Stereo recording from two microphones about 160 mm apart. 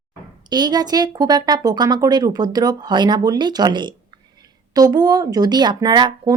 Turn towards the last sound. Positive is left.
turn(degrees=-25)  # may be behind; listen again after turning